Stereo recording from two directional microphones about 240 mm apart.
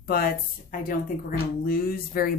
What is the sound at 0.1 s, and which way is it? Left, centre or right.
Speech, left.